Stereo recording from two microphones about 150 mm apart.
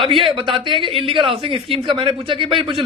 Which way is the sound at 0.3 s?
35° right (ahead or behind).